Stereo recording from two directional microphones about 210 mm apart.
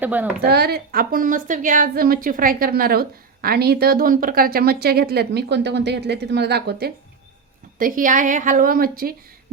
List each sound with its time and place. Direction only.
0.0 s speech: 10° right (ahead or behind)
0.4 s a woman's voice: 50° right (ahead or behind)